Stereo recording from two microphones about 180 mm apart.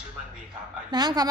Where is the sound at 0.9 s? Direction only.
25° right (ahead or behind).